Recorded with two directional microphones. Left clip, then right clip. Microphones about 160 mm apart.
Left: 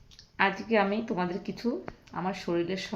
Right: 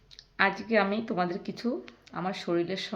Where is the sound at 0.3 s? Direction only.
15° right (ahead or behind).